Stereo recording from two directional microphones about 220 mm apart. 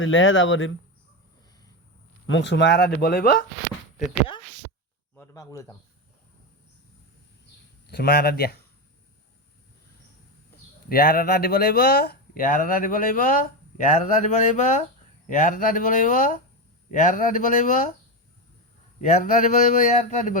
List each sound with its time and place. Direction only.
0.0 s speech: 60° left (ahead or behind)
2.2 s speech: 55° left (ahead or behind)
5.1 s speech: 10° left (ahead or behind)
7.9 s speech: 45° left (ahead or behind)
10.8 s speech: 40° left (ahead or behind)
18.9 s speech: 35° left (ahead or behind)